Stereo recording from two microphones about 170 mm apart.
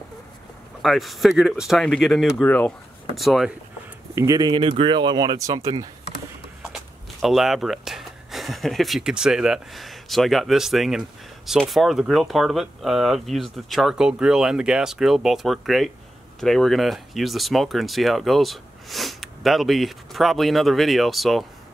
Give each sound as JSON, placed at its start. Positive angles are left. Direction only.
{"t": 0.8, "sound": "speech", "side_deg": 0}
{"t": 3.2, "sound": "speech", "side_deg": 0}
{"t": 4.1, "sound": "speech", "side_deg": -20}
{"t": 6.6, "sound": "speech", "side_deg": 0}